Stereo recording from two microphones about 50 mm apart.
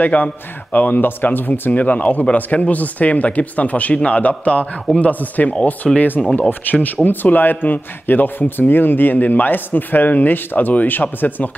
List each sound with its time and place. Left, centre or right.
0.0 s a man's voice: left
1.7 s a man's voice: left